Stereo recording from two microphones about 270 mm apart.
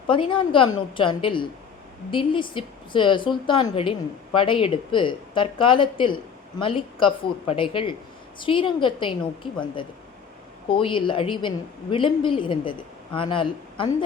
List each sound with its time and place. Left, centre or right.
0.1 s a woman's voice: centre
10.7 s a woman's voice: centre